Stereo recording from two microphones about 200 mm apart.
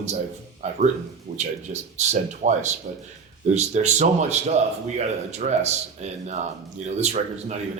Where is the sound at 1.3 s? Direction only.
35° right (ahead or behind).